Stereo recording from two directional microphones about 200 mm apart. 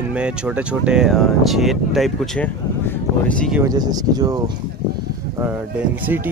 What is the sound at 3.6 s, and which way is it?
Speech, 20° right (ahead or behind).